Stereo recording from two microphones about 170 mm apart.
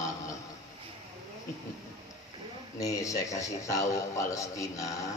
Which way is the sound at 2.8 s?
20° left (ahead or behind).